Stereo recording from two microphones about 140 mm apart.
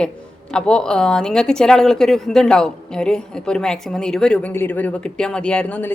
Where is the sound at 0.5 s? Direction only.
5° left (ahead or behind).